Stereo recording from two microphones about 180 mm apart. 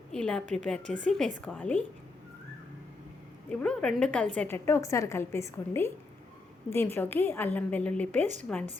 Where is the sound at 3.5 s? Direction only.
5° left (ahead or behind).